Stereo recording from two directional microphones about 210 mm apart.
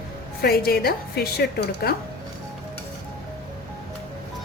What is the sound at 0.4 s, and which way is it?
A woman's voice, 45° left (ahead or behind).